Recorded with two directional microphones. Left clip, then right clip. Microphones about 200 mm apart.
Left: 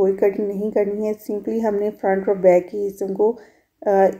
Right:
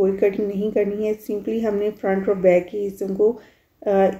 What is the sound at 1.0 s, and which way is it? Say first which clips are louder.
Speech: even; 50° left (ahead or behind).